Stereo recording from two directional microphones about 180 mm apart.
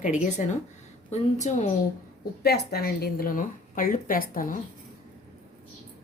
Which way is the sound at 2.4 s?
60° left (ahead or behind).